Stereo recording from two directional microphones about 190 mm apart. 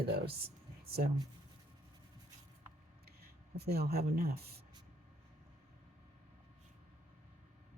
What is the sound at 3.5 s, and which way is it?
Speech, 55° right (ahead or behind).